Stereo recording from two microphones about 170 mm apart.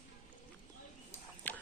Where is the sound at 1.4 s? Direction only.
10° left (ahead or behind).